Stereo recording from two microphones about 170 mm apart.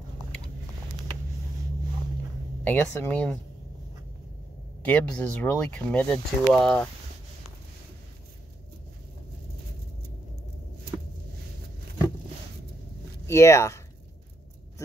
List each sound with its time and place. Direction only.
2.6 s speech: 10° left (ahead or behind)
4.8 s speech: 10° left (ahead or behind)
13.3 s speech: 15° left (ahead or behind)